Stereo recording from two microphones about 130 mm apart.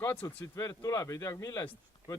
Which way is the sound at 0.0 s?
20° left (ahead or behind).